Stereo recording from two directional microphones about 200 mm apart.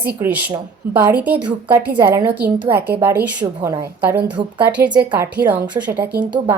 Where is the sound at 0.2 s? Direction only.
10° right (ahead or behind).